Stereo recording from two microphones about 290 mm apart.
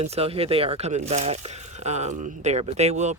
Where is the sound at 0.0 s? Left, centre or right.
Right.